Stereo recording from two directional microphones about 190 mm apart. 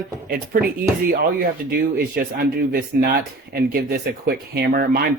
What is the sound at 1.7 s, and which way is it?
Speech, 50° right (ahead or behind).